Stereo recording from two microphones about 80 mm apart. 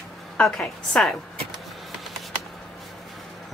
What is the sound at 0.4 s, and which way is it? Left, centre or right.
Speech, centre.